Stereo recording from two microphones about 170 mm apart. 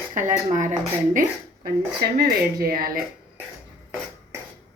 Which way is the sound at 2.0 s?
65° right (ahead or behind).